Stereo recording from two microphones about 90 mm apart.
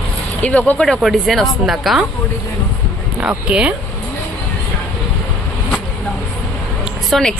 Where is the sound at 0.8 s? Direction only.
Centre (ahead or behind).